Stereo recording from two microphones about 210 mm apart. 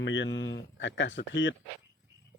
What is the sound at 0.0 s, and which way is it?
A man's voice, 60° left (ahead or behind).